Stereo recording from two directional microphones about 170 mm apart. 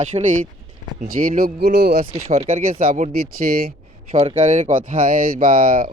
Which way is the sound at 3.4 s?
50° right (ahead or behind).